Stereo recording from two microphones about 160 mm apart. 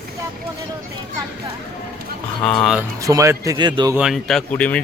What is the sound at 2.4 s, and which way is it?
Speech, 5° left (ahead or behind).